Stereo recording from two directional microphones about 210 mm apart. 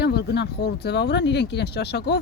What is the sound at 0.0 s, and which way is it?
Speech, 50° left (ahead or behind).